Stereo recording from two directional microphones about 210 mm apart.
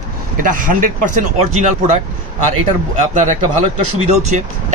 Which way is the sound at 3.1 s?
30° right (ahead or behind).